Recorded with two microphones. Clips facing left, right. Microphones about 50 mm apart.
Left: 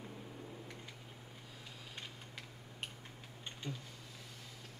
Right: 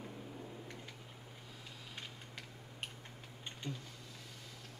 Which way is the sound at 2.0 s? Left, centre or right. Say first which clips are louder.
Even; centre.